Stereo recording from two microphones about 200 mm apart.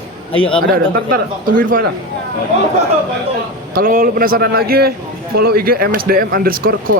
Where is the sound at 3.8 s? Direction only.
45° right (ahead or behind).